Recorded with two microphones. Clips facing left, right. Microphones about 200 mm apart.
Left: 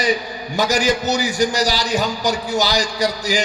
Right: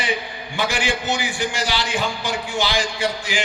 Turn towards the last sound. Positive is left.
turn(degrees=40)  # may be behind; listen again after turning